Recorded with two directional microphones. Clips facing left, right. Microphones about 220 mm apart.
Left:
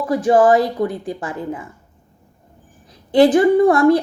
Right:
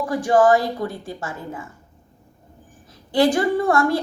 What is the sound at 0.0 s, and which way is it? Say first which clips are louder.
A woman's voice: left 3 dB; 25° left (ahead or behind).